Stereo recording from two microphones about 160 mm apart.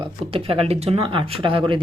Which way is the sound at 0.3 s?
35° right (ahead or behind).